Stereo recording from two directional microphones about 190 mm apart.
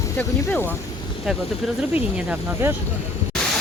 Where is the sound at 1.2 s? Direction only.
Centre (ahead or behind).